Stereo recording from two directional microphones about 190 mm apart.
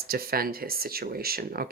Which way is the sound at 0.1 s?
50° right (ahead or behind).